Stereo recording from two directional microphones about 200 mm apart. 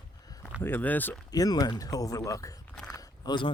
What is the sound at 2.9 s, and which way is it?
Biting, 20° left (ahead or behind).